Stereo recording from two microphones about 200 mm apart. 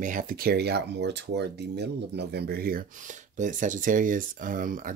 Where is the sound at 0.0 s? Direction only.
45° right (ahead or behind).